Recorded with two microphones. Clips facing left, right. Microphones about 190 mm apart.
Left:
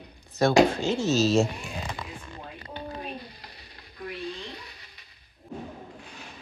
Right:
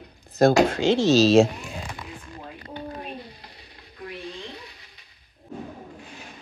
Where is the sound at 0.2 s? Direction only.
55° right (ahead or behind).